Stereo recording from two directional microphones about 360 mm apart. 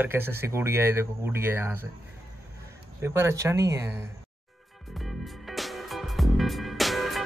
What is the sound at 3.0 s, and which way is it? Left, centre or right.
Speech, centre.